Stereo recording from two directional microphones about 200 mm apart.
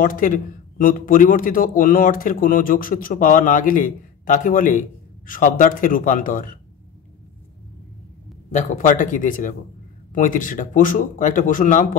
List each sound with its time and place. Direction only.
0.0 s a man's voice: 45° left (ahead or behind)
8.5 s speech: 40° left (ahead or behind)